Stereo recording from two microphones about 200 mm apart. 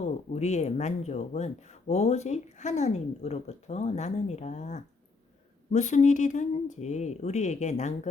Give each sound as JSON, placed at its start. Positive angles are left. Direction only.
{"t": 0.0, "sound": "speech", "side_deg": 35}